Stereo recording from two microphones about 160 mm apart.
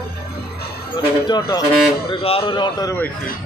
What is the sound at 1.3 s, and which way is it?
A man's voice, 25° left (ahead or behind).